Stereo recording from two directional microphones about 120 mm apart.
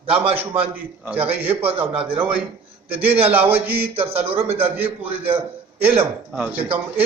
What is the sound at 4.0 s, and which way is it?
Speech, 55° right (ahead or behind).